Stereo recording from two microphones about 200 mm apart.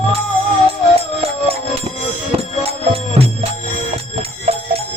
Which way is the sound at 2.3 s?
30° right (ahead or behind).